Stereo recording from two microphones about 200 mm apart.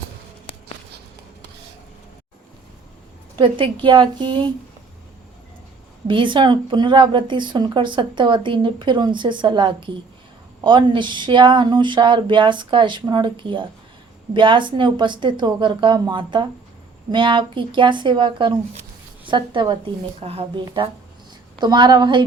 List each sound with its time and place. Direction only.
3.3 s a woman's voice: 25° right (ahead or behind)
6.1 s a woman's voice: 25° right (ahead or behind)
18.8 s a sound: 25° right (ahead or behind)
20.2 s a woman's voice: 30° right (ahead or behind)